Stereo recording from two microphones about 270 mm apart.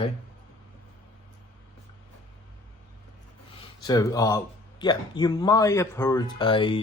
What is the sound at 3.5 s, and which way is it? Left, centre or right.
Speech, centre.